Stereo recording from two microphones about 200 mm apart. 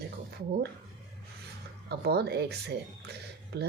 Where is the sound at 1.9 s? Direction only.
55° right (ahead or behind).